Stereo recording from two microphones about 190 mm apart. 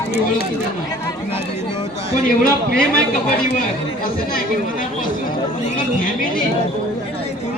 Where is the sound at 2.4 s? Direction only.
50° left (ahead or behind).